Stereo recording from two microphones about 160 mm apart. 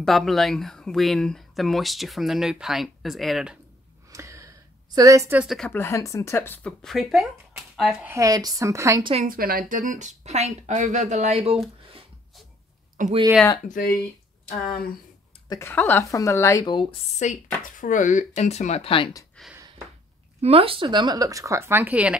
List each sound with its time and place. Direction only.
0.0 s speech: centre (ahead or behind)
4.1 s a sound: 20° right (ahead or behind)
5.4 s speech: centre (ahead or behind)
5.7 s speech: 15° left (ahead or behind); by 8.2 s 10° right (ahead or behind)
8.2 s speech: 25° right (ahead or behind)
9.2 s speech: 65° right (ahead or behind); by 11.6 s 40° right (ahead or behind)
13.0 s speech: 55° right (ahead or behind)
13.7 s speech: 65° left (ahead or behind)
15.4 s a sound: 25° left (ahead or behind)
15.7 s speech: 10° left (ahead or behind); by 16.9 s 30° left (ahead or behind)
17.2 s speech: 50° left (ahead or behind)
19.4 s a sound: 5° left (ahead or behind)
20.4 s speech: 35° right (ahead or behind); by 22.1 s 10° right (ahead or behind)